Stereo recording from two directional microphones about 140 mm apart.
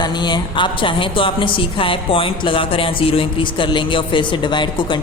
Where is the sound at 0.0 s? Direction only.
30° left (ahead or behind).